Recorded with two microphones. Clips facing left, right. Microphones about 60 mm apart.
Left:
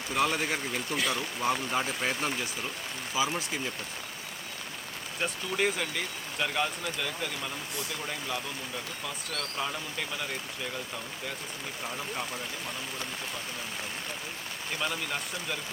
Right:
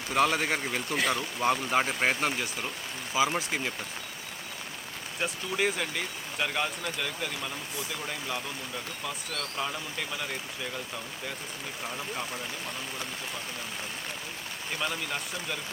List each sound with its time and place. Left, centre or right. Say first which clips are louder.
0.1 s speech: right 3 dB; right
3.3 s speech: right 3 dB; right
5.2 s speech: even; centre
9.6 s speech: even; centre
11.9 s speech: even; centre
14.8 s speech: even; centre